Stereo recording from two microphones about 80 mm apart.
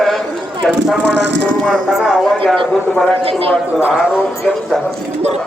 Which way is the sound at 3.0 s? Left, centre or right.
Centre.